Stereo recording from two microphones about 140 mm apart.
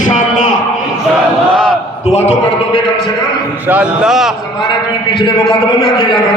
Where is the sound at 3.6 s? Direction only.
10° right (ahead or behind).